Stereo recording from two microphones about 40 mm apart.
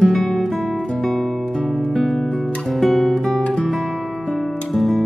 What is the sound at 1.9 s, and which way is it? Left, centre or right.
Music, centre.